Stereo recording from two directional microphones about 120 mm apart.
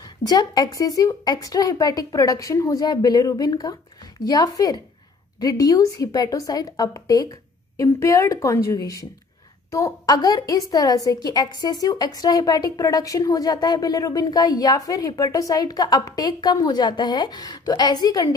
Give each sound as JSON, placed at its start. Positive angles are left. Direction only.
{"t": 0.0, "sound": "a woman's voice", "side_deg": 35}